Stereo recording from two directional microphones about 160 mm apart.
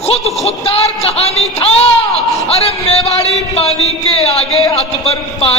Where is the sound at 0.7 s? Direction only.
40° left (ahead or behind).